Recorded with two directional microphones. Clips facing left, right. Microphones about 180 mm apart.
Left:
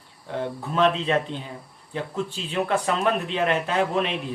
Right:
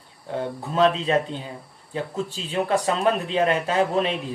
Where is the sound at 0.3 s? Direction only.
35° right (ahead or behind).